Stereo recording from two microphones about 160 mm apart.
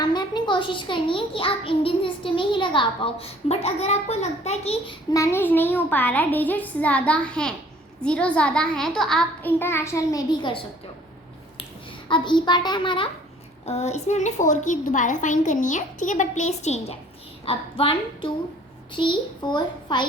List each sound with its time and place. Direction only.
0.0 s a child's voice: 25° left (ahead or behind)
5.1 s a child's voice: 15° left (ahead or behind)
12.0 s a child's voice: 30° left (ahead or behind)
13.7 s a woman's voice: 40° left (ahead or behind)